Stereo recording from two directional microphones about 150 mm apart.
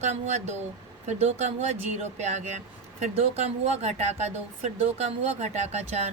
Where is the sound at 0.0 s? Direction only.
50° right (ahead or behind).